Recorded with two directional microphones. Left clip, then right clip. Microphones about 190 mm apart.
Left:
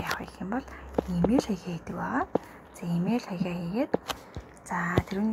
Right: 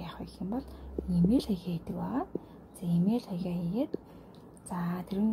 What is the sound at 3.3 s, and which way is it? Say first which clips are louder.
Speech: left 4 dB; 30° left (ahead or behind).